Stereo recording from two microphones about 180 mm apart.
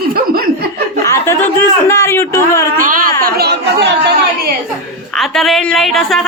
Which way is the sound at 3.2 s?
65° right (ahead or behind).